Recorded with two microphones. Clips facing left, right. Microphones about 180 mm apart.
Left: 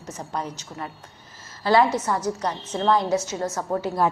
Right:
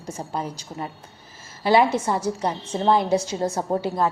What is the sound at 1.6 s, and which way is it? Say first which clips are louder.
A woman's voice: right 1 dB; 20° right (ahead or behind).